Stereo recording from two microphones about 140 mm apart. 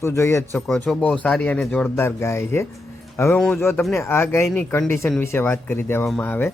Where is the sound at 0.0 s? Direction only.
20° left (ahead or behind).